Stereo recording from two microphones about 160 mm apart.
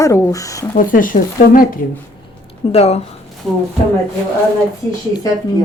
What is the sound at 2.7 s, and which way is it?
Speech, 40° left (ahead or behind).